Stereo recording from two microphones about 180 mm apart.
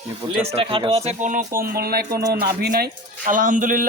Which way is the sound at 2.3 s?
60° right (ahead or behind).